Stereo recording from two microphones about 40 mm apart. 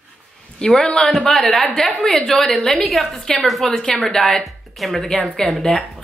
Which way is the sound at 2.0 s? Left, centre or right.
Centre.